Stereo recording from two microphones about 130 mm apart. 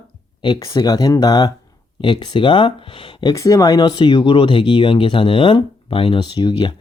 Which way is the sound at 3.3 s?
25° left (ahead or behind).